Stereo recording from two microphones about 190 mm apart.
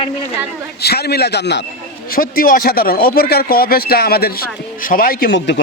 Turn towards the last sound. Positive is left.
turn(degrees=50)  # may be behind; listen again after turning